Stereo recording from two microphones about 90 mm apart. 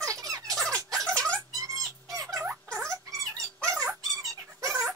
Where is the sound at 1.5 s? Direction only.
40° right (ahead or behind).